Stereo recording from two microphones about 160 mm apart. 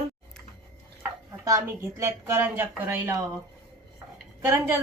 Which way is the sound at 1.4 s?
20° right (ahead or behind).